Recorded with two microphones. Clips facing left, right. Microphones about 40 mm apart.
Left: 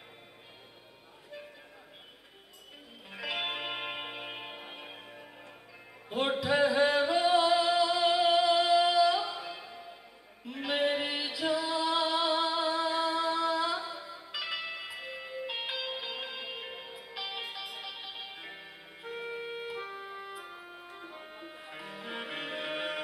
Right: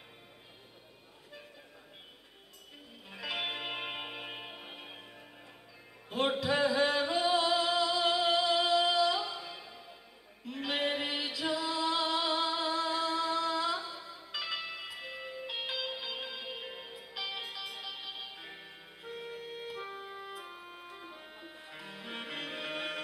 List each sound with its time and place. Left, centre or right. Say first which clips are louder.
3.1 s music: left 2 dB; centre
15.0 s music: left 2 dB; centre